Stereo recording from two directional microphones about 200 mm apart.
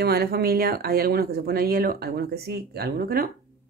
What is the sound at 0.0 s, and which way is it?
Speech, 50° right (ahead or behind).